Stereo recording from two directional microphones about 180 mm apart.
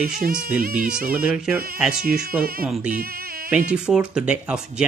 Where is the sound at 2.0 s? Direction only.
55° right (ahead or behind).